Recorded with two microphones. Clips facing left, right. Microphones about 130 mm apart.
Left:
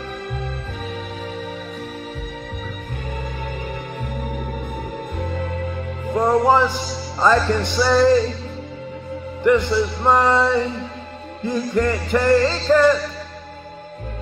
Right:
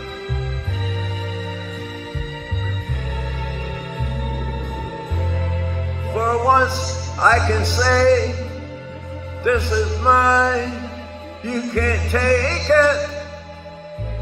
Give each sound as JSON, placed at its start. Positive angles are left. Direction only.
{"t": 5.2, "sound": "music", "side_deg": 45}
{"t": 6.1, "sound": "music", "side_deg": 15}
{"t": 9.4, "sound": "music", "side_deg": 15}
{"t": 11.4, "sound": "music", "side_deg": 15}